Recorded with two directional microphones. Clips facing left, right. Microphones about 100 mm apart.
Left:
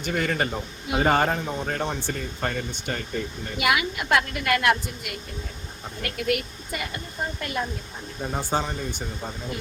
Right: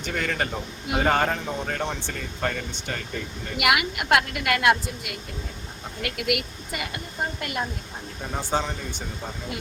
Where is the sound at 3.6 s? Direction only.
65° right (ahead or behind).